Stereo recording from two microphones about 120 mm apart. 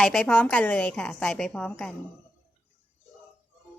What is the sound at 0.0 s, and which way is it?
A woman's voice, 5° left (ahead or behind).